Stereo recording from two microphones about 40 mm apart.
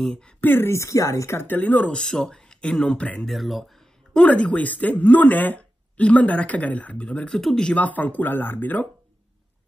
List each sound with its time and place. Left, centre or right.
0.4 s a woman's voice: left
1.5 s speech: left
1.9 s speech: centre
2.1 s a sound: centre
2.6 s speech: left
3.3 s speech: centre
4.2 s speech: left
4.6 s speech: left
7.2 s speech: centre
7.7 s speech: left